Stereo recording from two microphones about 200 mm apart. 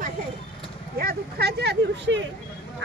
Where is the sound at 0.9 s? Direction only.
50° right (ahead or behind).